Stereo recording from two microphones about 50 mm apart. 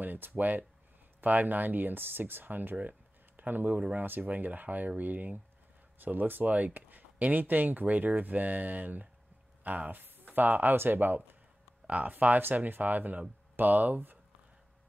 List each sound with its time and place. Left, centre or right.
0.0 s speech: right